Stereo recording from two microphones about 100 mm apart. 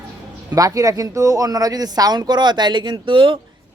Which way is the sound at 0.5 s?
35° right (ahead or behind).